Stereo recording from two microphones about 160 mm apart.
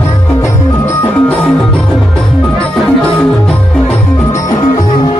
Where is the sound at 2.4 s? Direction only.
5° left (ahead or behind); by 5.1 s 25° left (ahead or behind).